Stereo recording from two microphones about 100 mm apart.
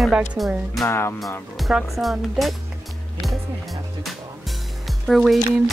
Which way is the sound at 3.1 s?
Centre (ahead or behind).